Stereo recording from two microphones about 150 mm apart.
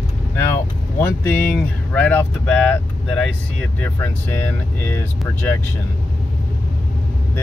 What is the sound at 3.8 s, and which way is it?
Speech, 15° left (ahead or behind).